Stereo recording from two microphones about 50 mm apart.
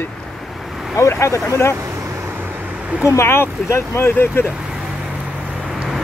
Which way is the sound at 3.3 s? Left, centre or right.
Left.